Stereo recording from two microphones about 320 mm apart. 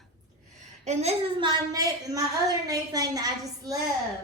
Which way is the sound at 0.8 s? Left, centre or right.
Centre.